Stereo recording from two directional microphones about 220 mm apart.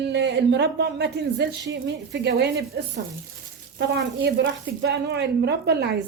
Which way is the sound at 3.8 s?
50° right (ahead or behind).